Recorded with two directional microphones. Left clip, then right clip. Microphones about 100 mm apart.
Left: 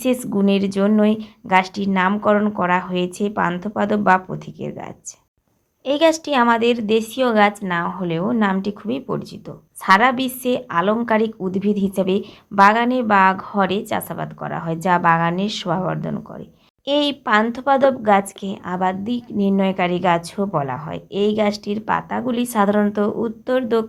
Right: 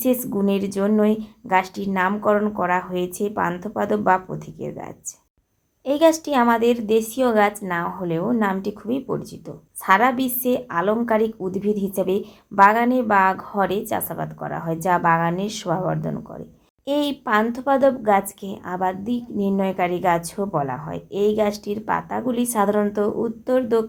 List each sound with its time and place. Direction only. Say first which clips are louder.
0.0 s a woman's voice: left 2 dB; 20° left (ahead or behind)